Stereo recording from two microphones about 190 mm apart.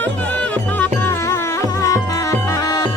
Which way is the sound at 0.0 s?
10° left (ahead or behind).